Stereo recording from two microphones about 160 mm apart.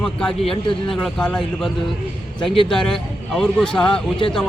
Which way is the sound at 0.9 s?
5° left (ahead or behind).